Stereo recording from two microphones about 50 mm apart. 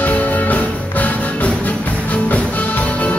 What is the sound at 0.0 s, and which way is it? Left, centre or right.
Music, left.